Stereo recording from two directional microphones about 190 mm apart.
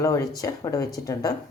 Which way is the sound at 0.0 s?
15° left (ahead or behind).